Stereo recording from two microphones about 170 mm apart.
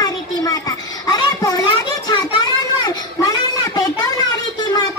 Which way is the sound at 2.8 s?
20° left (ahead or behind).